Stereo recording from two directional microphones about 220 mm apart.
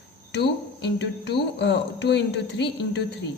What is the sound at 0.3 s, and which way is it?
A woman's voice, 50° left (ahead or behind).